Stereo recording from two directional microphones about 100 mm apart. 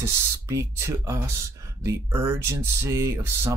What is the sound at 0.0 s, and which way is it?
Speech, 30° right (ahead or behind).